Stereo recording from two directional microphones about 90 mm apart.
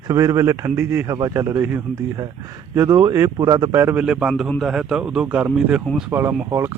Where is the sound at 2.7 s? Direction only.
35° right (ahead or behind).